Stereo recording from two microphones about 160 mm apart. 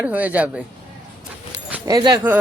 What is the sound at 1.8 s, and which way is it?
Speech, 25° right (ahead or behind).